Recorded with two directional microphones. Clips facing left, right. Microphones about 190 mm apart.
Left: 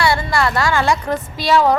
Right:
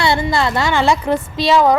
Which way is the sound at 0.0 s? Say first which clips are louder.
Right 1 dB; 20° right (ahead or behind).